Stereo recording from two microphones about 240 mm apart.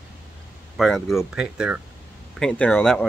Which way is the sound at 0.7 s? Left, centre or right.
Centre.